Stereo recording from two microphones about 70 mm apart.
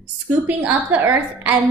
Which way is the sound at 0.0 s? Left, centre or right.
Right.